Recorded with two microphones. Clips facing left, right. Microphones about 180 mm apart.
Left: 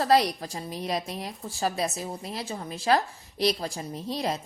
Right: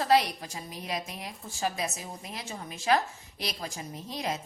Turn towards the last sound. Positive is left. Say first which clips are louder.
# left 4 dB
turn(degrees=35)  # may be behind; listen again after turning